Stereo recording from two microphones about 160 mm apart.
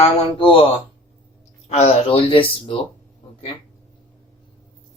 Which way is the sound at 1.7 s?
40° left (ahead or behind).